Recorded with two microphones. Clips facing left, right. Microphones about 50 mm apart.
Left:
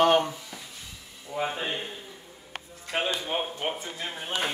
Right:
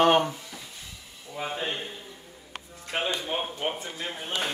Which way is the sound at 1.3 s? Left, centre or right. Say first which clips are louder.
Left 2 dB; centre.